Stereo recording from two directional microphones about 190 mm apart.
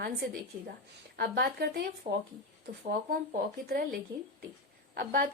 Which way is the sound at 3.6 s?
50° right (ahead or behind).